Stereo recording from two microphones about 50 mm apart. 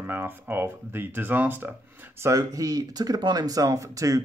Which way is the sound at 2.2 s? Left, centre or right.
Right.